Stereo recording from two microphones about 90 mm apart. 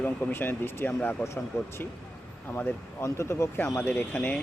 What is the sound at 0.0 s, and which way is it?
Speech, 20° left (ahead or behind).